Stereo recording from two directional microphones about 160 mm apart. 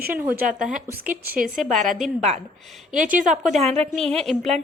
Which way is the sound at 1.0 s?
10° right (ahead or behind).